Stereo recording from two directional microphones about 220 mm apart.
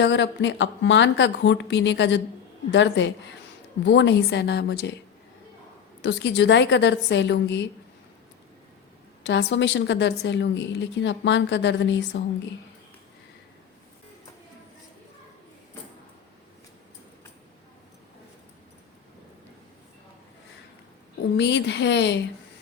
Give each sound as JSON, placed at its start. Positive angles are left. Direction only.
{"t": 0.0, "sound": "a woman's voice", "side_deg": 55}
{"t": 6.0, "sound": "a woman's voice", "side_deg": 55}
{"t": 9.2, "sound": "a woman's voice", "side_deg": 55}
{"t": 21.3, "sound": "a woman's voice", "side_deg": 55}